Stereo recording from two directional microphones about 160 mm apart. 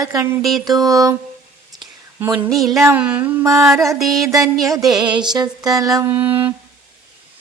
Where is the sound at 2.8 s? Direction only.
10° right (ahead or behind).